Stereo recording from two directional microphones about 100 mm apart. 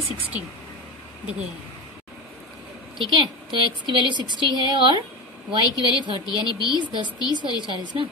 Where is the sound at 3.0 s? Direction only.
55° right (ahead or behind).